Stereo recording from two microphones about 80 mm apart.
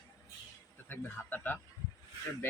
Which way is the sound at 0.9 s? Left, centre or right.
Left.